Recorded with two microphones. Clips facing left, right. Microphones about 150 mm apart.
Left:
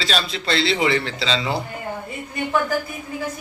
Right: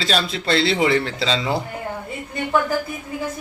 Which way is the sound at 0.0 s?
50° right (ahead or behind).